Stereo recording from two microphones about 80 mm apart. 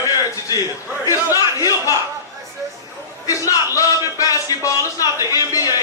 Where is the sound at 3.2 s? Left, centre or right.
Left.